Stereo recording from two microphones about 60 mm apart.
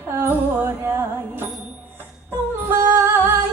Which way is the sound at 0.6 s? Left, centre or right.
Right.